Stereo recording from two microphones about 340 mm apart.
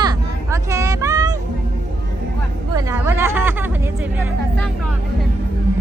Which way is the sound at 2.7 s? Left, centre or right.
Centre.